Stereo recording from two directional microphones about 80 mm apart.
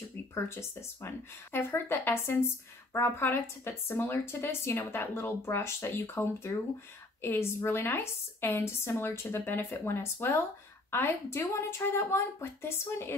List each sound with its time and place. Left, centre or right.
0.3 s a woman's voice: left